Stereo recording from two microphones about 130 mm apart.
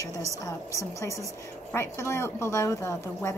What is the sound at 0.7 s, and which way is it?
A woman's voice, 25° left (ahead or behind).